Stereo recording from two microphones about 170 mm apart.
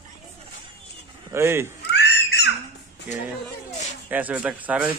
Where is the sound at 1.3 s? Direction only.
15° right (ahead or behind).